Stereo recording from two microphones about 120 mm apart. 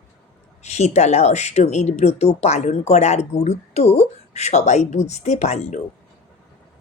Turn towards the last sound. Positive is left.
turn(degrees=70)  # may be behind; listen again after turning